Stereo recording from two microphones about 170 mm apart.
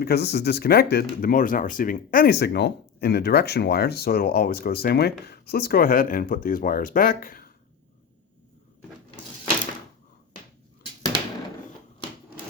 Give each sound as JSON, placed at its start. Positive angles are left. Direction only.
{"t": 0.0, "sound": "speech", "side_deg": 70}